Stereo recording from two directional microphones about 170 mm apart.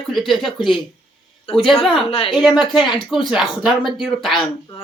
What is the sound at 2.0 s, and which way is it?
Speech, 35° left (ahead or behind).